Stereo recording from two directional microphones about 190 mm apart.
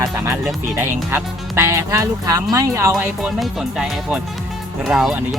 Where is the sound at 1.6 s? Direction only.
15° right (ahead or behind).